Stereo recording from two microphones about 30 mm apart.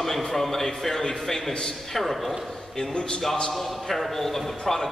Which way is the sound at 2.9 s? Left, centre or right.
Left.